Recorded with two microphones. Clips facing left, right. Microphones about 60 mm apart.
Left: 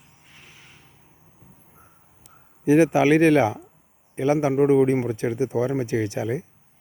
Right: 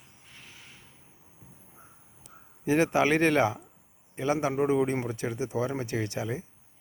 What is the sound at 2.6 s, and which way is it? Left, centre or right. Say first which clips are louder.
A man's voice: left 7 dB; centre.